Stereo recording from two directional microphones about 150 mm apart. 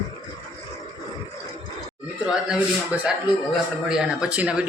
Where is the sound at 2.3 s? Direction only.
5° right (ahead or behind).